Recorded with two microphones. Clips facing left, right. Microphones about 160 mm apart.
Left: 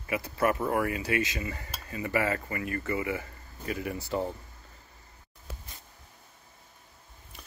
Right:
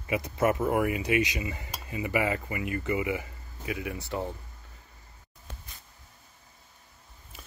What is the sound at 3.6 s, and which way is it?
Speech, centre (ahead or behind).